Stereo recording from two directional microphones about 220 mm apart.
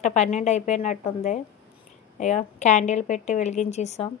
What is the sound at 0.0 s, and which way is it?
Speech, 30° left (ahead or behind).